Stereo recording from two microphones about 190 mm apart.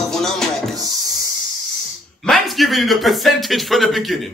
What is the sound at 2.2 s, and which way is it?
Speech, centre (ahead or behind).